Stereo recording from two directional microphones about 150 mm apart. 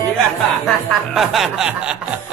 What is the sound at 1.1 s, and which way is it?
Speech, centre (ahead or behind).